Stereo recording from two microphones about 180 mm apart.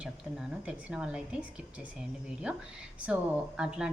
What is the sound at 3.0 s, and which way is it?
Speech, 5° right (ahead or behind).